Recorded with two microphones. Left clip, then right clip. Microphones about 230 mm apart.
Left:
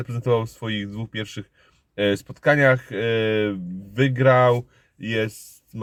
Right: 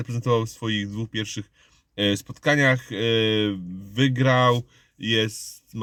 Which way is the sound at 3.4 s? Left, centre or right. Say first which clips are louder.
Left 1 dB; centre.